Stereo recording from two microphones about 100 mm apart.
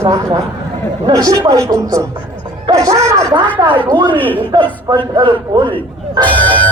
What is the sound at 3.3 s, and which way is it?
Speech, 50° right (ahead or behind).